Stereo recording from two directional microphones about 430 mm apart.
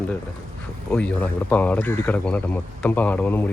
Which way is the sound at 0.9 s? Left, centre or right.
Centre.